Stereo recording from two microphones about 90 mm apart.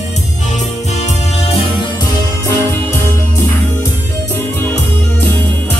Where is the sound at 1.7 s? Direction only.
55° left (ahead or behind).